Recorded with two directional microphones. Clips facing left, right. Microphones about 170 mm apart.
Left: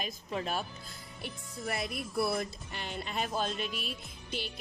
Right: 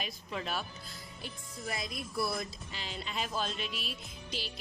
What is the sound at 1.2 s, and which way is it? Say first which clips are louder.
Speech: left 3 dB; 60° left (ahead or behind).